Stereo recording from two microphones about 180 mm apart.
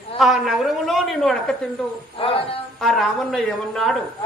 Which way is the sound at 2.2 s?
30° left (ahead or behind).